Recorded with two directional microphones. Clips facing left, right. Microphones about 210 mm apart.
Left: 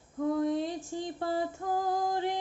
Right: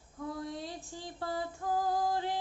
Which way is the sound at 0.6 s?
20° left (ahead or behind).